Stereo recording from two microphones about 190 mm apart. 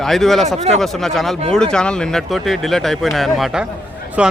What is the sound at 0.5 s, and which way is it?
Speech, 35° right (ahead or behind).